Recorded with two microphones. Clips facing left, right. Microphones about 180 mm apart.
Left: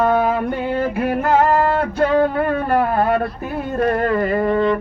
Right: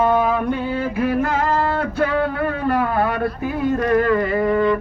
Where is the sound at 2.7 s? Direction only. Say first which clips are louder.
Left 2 dB; 55° left (ahead or behind).